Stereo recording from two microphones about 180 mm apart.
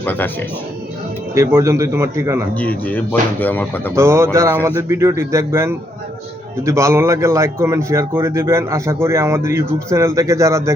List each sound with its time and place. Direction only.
0.0 s speech: 10° left (ahead or behind)
1.4 s speech: 15° right (ahead or behind)
2.6 s speech: 10° left (ahead or behind)
3.9 s speech: 15° right (ahead or behind)